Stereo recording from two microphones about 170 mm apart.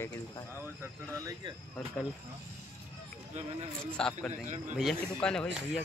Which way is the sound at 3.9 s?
5° left (ahead or behind).